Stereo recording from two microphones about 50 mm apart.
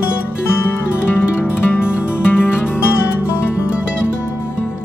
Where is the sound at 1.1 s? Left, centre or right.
Left.